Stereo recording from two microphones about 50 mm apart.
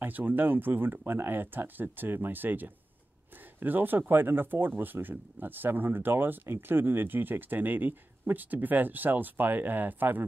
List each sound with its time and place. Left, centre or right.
0.0 s speech: right